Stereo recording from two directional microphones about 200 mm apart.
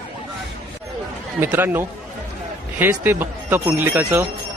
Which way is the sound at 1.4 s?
10° right (ahead or behind).